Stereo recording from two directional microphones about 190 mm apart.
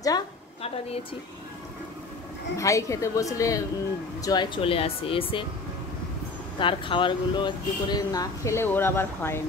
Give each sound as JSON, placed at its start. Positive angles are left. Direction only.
{"t": 0.6, "sound": "a sound", "side_deg": 30}
{"t": 2.5, "sound": "a woman's voice", "side_deg": 15}
{"t": 6.6, "sound": "speech", "side_deg": 25}